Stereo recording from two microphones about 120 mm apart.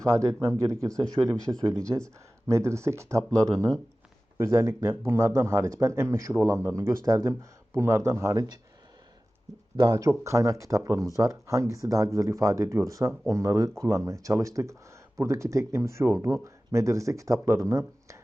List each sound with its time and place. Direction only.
0.0 s speech: 25° right (ahead or behind)
0.9 s speech: 5° left (ahead or behind)
2.5 s speech: 25° right (ahead or behind)
9.7 s speech: 30° right (ahead or behind)